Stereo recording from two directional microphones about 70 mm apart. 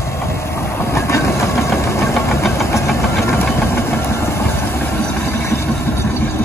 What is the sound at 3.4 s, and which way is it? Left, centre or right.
Vehicle, left.